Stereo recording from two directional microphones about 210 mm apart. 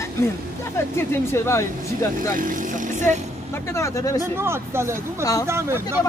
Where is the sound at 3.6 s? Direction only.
15° left (ahead or behind).